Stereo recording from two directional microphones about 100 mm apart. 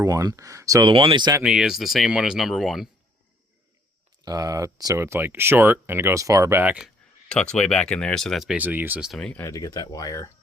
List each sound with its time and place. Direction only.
0.0 s speech: 35° right (ahead or behind)
0.9 s speech: 55° right (ahead or behind)
1.4 s speech: 5° right (ahead or behind)
4.3 s speech: 40° right (ahead or behind)
6.6 s speech: 10° right (ahead or behind)
7.3 s speech: 10° left (ahead or behind)
8.5 s speech: 20° right (ahead or behind)
9.0 s speech: 5° right (ahead or behind)
9.4 s speech: 35° left (ahead or behind)